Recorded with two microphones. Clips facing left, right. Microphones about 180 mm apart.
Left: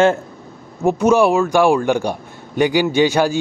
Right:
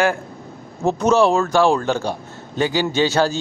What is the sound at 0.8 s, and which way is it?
A man's voice, 10° left (ahead or behind).